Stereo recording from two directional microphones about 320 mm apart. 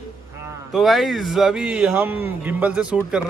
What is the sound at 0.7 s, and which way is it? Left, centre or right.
Speech, centre.